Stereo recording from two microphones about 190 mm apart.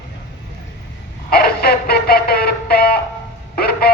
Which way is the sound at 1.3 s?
55° left (ahead or behind).